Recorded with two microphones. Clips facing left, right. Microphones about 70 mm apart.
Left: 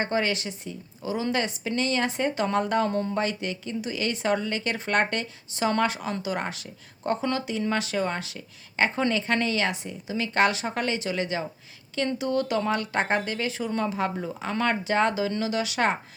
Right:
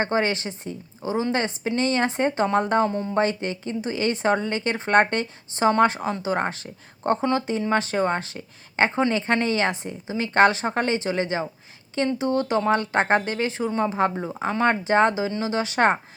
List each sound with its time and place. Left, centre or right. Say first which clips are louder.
0.0 s a woman's voice: right 3 dB; right